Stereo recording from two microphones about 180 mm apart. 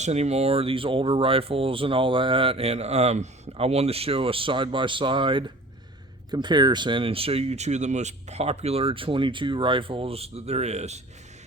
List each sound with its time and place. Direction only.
0.0 s speech: 35° right (ahead or behind)